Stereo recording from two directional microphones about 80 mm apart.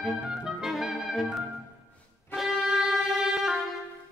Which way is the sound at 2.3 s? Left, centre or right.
Centre.